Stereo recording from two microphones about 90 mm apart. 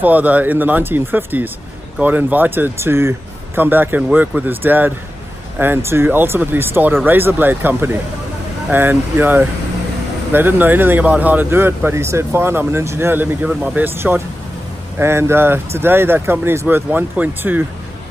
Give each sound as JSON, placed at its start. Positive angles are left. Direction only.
{"t": 0.0, "sound": "speech", "side_deg": -20}